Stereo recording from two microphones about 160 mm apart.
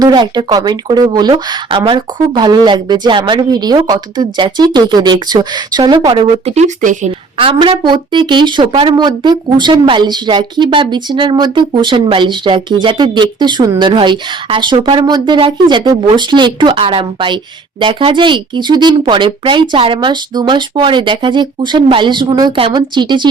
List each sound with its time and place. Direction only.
0.0 s a woman's voice: 25° right (ahead or behind); by 7.1 s 45° right (ahead or behind)
7.3 s a woman's voice: 35° right (ahead or behind)